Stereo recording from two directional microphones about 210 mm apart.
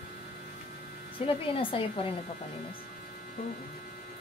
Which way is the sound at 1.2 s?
25° left (ahead or behind).